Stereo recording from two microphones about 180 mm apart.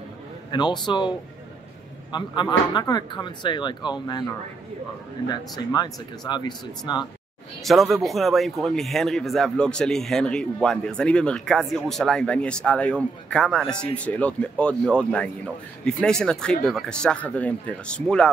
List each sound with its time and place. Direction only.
0.5 s speech: 25° left (ahead or behind)
2.1 s speech: 25° left (ahead or behind)
5.3 s speech: 25° left (ahead or behind)
7.6 s a man's voice: centre (ahead or behind)